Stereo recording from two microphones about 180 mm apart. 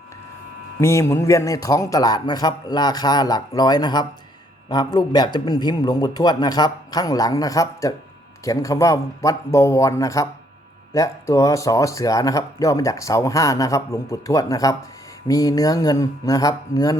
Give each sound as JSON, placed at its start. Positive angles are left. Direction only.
{"t": 0.8, "sound": "a man's voice", "side_deg": 15}